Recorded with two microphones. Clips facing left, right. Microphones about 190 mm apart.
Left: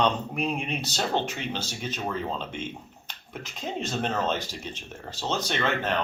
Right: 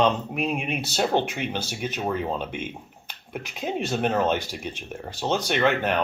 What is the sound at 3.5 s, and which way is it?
Speech, 10° right (ahead or behind).